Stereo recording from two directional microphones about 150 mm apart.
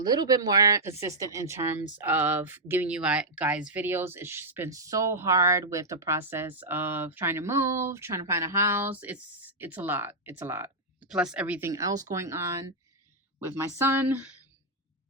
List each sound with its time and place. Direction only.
0.0 s a woman's voice: 25° right (ahead or behind); by 11.7 s 10° right (ahead or behind)
11.7 s a woman's voice: 20° right (ahead or behind)